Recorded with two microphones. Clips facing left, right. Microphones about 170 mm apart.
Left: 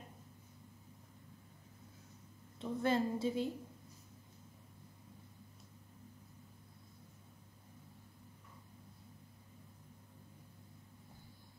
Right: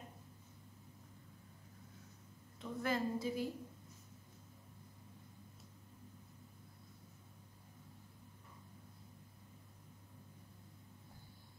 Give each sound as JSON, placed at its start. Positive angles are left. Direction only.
{"t": 2.6, "sound": "a woman's voice", "side_deg": 25}